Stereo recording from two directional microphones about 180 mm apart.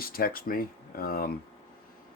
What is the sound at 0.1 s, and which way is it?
Speech, 55° left (ahead or behind).